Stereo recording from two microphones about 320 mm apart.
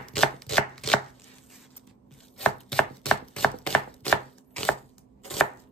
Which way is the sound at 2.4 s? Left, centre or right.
Centre.